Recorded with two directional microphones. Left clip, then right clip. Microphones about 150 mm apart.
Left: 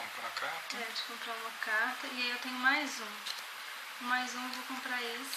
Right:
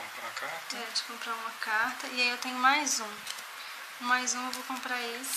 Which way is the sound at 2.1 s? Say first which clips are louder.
Right 6 dB; 60° right (ahead or behind).